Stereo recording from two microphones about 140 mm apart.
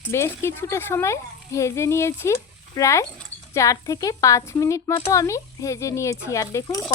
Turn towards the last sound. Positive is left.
turn(degrees=25)  # may be behind; listen again after turning